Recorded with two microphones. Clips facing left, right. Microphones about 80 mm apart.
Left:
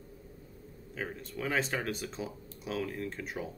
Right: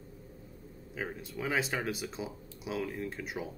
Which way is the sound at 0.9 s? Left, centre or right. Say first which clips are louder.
Even; centre.